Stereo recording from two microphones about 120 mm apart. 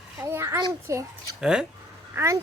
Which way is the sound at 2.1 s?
25° right (ahead or behind).